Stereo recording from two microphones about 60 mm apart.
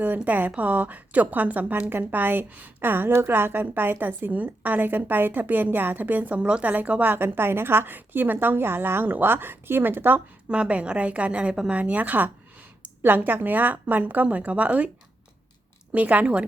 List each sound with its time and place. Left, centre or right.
0.3 s a woman's voice: right
10.5 s a woman's voice: centre
15.9 s a woman's voice: right